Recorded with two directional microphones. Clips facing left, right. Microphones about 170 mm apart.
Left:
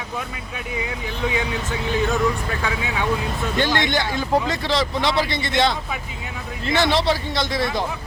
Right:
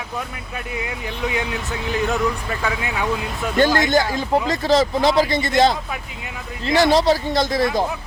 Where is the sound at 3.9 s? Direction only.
40° right (ahead or behind).